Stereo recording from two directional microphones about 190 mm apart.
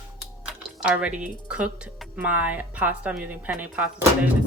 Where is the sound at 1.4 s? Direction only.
5° right (ahead or behind).